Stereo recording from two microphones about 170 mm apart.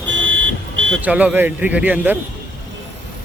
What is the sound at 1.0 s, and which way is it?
A man's voice, 10° right (ahead or behind).